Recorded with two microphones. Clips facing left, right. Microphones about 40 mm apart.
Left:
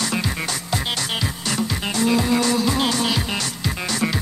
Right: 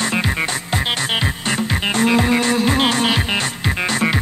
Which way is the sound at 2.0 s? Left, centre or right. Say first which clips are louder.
Right 2 dB; right.